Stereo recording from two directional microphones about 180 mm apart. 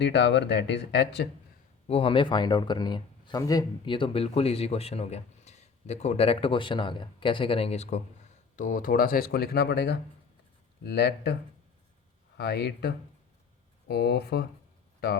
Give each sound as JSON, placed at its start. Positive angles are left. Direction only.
{"t": 0.0, "sound": "speech", "side_deg": 70}
{"t": 1.9, "sound": "speech", "side_deg": 30}
{"t": 12.4, "sound": "speech", "side_deg": 65}